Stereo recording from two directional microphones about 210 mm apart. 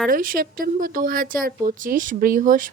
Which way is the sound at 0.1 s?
40° right (ahead or behind).